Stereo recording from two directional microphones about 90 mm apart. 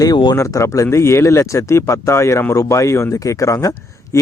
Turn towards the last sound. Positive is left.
turn(degrees=35)  # may be behind; listen again after turning